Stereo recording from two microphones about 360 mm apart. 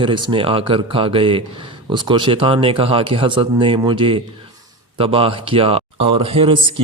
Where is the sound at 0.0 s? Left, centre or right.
Centre.